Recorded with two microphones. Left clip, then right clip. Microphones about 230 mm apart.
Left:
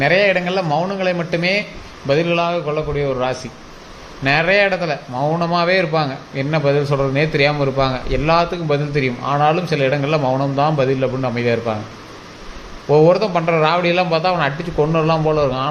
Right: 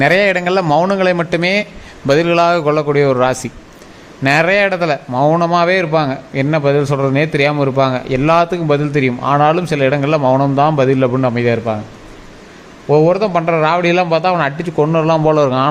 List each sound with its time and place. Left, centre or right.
0.0 s a man's voice: right
12.9 s a man's voice: centre